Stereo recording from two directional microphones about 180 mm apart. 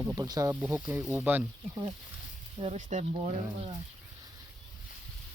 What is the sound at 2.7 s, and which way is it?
Speech, 45° right (ahead or behind).